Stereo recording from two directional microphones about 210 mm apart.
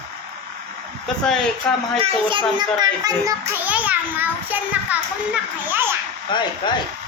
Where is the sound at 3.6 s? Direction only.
5° right (ahead or behind).